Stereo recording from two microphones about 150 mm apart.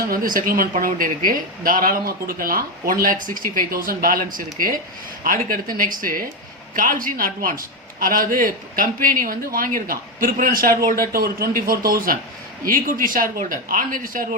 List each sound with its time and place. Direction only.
0.1 s a man's voice: 70° right (ahead or behind)